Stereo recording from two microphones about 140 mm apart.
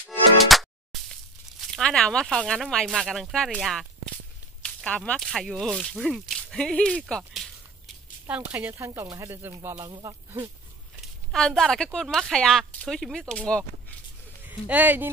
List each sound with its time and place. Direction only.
0.5 s music: centre (ahead or behind)
1.6 s speech: 5° left (ahead or behind)
8.3 s speech: 10° right (ahead or behind); by 10.5 s 35° right (ahead or behind)
11.3 s speech: 5° left (ahead or behind)
14.7 s speech: 10° right (ahead or behind)